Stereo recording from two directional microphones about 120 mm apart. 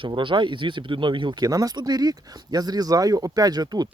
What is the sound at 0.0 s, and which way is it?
Speech, 45° right (ahead or behind).